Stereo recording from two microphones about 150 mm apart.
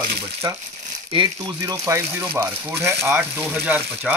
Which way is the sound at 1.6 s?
20° right (ahead or behind).